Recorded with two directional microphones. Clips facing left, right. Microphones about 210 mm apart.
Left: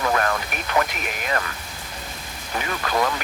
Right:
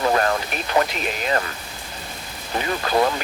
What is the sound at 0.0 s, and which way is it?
Speech, 30° right (ahead or behind).